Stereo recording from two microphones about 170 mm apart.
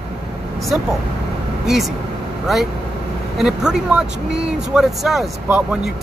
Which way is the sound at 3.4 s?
5° right (ahead or behind).